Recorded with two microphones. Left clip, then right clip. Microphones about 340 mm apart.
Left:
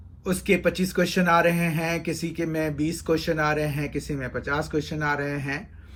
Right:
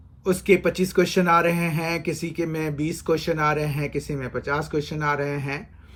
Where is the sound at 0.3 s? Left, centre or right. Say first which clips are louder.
Right 3 dB; centre.